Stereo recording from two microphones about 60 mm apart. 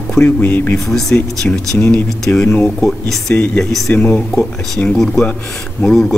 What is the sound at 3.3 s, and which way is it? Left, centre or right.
Speech, left.